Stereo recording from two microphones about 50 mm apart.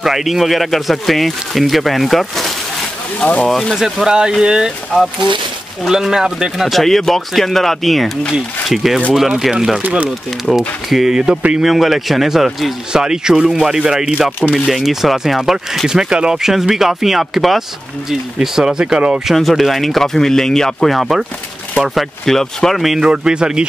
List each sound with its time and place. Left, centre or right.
0.0 s speech: centre
3.2 s speech: left
3.7 s speech: centre
6.7 s speech: centre
10.9 s speech: centre
12.9 s speech: centre
16.5 s speech: centre
19.2 s speech: centre
20.9 s speech: centre
22.2 s speech: centre
22.9 s speech: centre